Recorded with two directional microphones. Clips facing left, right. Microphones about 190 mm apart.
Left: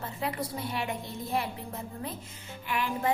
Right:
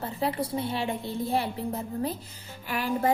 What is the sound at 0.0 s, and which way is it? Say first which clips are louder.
A woman's voice: right 5 dB; 30° right (ahead or behind).